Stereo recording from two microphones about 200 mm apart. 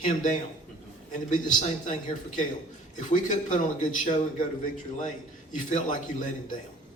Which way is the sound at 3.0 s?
35° left (ahead or behind).